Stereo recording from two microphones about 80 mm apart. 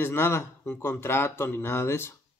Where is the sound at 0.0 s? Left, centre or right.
Left.